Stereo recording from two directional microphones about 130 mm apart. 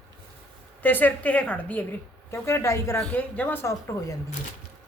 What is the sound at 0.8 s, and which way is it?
Speech, 15° left (ahead or behind).